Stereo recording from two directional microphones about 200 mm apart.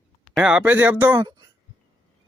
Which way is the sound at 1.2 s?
20° right (ahead or behind).